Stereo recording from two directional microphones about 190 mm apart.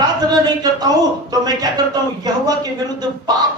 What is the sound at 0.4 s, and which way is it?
A man's voice, 20° right (ahead or behind).